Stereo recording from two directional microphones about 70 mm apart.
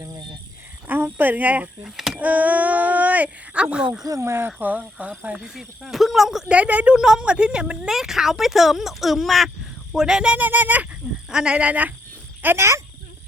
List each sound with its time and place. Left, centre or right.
0.9 s a sound: right
1.8 s speech: centre
2.1 s speech: right
4.2 s speech: right; by 5.4 s centre
5.4 s a woman's voice: centre
6.5 s a woman's voice: centre
10.3 s speech: right
11.3 s speech: centre; by 12.6 s right